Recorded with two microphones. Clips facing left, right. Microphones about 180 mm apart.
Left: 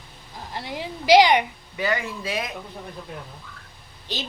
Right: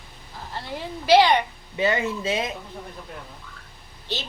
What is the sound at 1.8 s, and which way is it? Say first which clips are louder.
Speech: right 3 dB; 25° right (ahead or behind).